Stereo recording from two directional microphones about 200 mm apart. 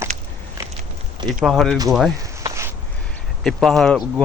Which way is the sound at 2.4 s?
15° right (ahead or behind).